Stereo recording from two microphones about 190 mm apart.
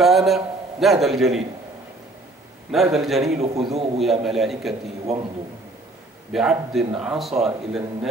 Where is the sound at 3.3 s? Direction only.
35° right (ahead or behind).